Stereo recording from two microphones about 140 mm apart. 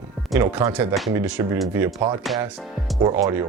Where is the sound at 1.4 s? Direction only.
25° right (ahead or behind).